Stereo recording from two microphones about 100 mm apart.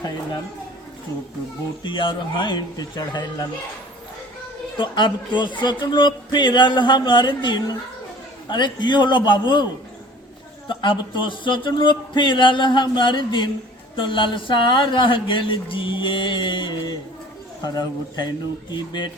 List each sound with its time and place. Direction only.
1.8 s speech: 55° left (ahead or behind)
4.8 s speech: 55° left (ahead or behind)
10.7 s a woman's voice: 50° left (ahead or behind)